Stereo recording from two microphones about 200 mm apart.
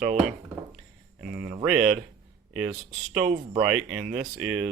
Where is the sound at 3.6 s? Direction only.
5° right (ahead or behind).